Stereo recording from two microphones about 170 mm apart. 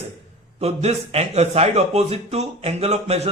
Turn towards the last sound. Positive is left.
turn(degrees=-40)  # may be behind; listen again after turning